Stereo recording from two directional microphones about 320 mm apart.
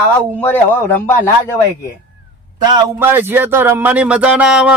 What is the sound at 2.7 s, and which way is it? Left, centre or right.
Speech, centre.